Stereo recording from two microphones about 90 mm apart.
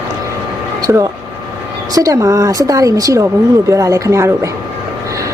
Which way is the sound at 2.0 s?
40° right (ahead or behind).